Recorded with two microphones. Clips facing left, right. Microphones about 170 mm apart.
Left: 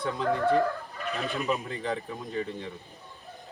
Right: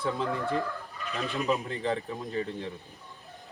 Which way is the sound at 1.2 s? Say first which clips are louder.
Right 1 dB; centre (ahead or behind).